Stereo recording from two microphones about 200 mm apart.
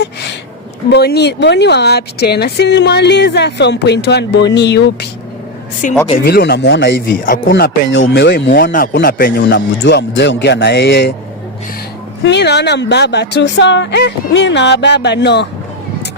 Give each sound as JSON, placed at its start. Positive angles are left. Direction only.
{"t": 0.9, "sound": "speech", "side_deg": 55}
{"t": 5.8, "sound": "speech", "side_deg": 40}
{"t": 6.2, "sound": "speech", "side_deg": 50}
{"t": 12.2, "sound": "speech", "side_deg": 60}